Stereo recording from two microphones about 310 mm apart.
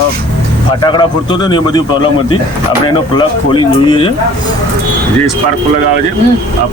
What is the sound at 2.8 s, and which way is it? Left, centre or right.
Speech, centre.